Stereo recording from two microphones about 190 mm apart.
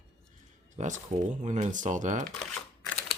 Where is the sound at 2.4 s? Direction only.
5° left (ahead or behind).